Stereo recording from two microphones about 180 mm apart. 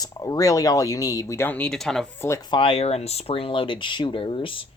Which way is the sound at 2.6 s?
30° left (ahead or behind).